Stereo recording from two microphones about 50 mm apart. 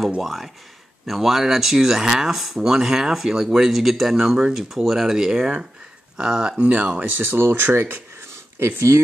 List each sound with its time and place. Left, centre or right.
0.2 s speech: centre
6.6 s speech: right
7.1 s speech: right